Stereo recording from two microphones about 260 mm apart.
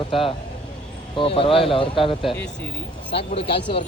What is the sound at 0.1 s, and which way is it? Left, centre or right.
Speech, centre.